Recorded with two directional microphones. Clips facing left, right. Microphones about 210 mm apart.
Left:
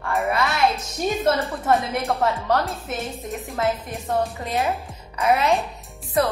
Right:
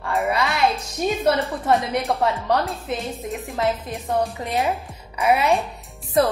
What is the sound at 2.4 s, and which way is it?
Speech, 15° right (ahead or behind).